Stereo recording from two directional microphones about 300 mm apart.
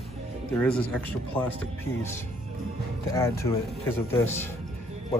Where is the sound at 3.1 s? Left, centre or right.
Centre.